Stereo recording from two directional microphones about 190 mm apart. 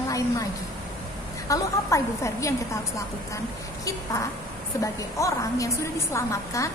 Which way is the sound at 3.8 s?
15° left (ahead or behind).